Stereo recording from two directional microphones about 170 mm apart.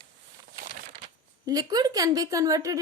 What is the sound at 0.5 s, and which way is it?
Crumpling, 60° right (ahead or behind).